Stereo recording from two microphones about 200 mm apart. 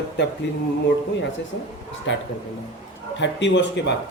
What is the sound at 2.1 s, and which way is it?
A man's voice, 65° left (ahead or behind).